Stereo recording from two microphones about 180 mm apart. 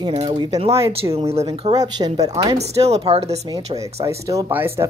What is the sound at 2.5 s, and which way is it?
Speech, 35° right (ahead or behind).